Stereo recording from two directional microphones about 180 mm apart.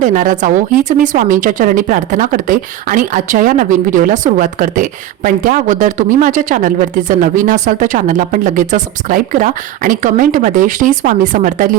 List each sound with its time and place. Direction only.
0.0 s speech: 45° right (ahead or behind)